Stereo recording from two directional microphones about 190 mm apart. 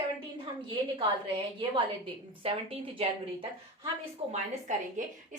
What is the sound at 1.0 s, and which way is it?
A woman's voice, 25° right (ahead or behind).